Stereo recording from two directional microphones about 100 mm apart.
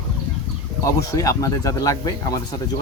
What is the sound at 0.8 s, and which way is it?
Speech, 35° left (ahead or behind).